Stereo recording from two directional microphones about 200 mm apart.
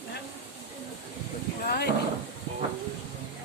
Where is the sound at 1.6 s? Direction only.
50° left (ahead or behind).